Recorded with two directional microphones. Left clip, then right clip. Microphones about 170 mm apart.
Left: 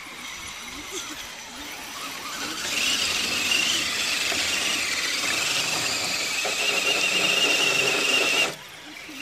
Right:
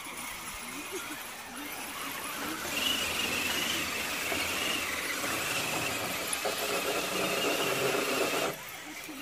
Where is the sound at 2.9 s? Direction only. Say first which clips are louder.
Left 6 dB; 25° left (ahead or behind).